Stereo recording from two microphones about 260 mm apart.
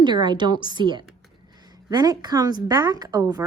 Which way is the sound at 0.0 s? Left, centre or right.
Centre.